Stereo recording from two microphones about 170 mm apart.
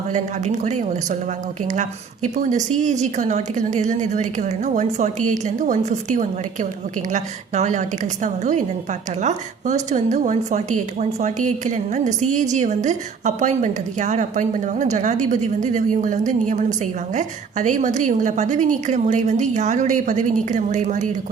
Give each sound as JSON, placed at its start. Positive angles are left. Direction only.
{"t": 0.1, "sound": "a woman's voice", "side_deg": -45}